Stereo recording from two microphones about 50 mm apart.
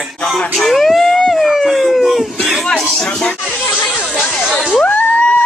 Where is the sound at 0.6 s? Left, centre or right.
Centre.